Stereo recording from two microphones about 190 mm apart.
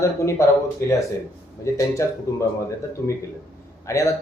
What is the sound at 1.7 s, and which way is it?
Speech, 15° left (ahead or behind).